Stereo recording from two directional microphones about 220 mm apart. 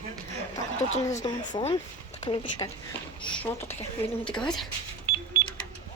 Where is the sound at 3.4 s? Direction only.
10° left (ahead or behind).